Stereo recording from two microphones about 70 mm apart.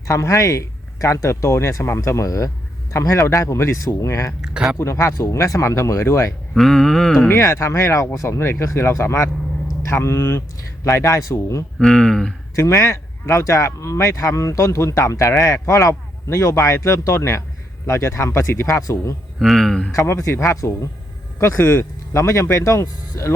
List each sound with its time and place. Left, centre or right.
0.1 s speech: left
4.4 s speech: centre
4.8 s speech: left
6.5 s a sound: centre
7.3 s speech: left
8.4 s speech: left
11.8 s speech: centre
12.5 s speech: left
18.8 s speech: left
19.4 s a sound: centre
19.9 s speech: left